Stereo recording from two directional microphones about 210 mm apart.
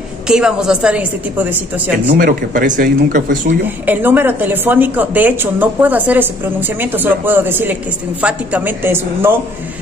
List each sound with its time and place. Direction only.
0.3 s a woman's voice: 5° right (ahead or behind)
2.0 s speech: 40° right (ahead or behind)
3.6 s speech: 10° right (ahead or behind)